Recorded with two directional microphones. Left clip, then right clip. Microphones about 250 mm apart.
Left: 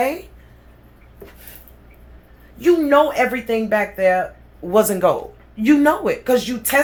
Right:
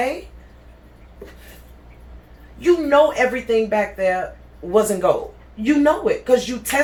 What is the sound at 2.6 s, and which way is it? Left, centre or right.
Speech, left.